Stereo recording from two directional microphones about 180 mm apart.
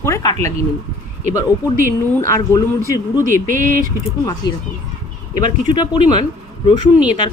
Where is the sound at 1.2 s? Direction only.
45° right (ahead or behind).